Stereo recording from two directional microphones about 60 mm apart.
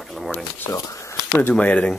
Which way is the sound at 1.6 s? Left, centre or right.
Left.